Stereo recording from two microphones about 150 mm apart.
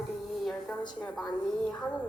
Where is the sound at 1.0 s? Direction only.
5° left (ahead or behind).